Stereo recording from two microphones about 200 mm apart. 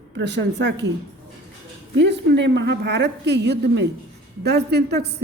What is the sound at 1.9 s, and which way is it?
A woman's voice, 60° right (ahead or behind).